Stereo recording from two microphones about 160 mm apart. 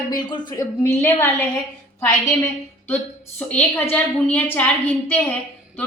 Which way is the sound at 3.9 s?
10° left (ahead or behind).